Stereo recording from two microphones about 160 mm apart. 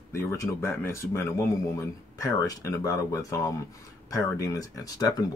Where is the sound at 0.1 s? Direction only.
15° left (ahead or behind).